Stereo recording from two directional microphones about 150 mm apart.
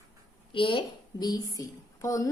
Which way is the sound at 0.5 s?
35° left (ahead or behind).